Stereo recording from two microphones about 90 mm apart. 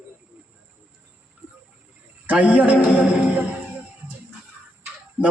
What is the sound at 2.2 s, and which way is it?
Speech, 15° right (ahead or behind).